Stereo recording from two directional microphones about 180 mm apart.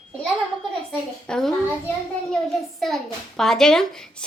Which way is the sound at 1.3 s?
5° left (ahead or behind).